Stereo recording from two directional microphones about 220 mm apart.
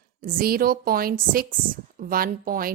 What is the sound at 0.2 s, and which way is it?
A woman's voice, 40° right (ahead or behind).